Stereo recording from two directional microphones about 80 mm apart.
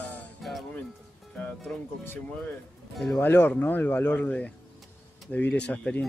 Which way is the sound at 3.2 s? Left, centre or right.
Left.